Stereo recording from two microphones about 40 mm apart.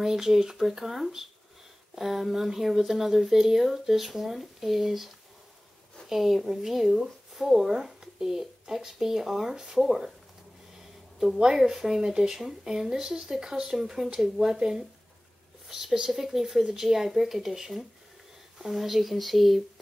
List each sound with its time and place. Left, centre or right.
0.0 s speech: centre
11.1 s a woman's voice: centre